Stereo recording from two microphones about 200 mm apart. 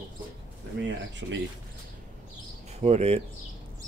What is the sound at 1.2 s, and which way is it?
Speech, 65° right (ahead or behind).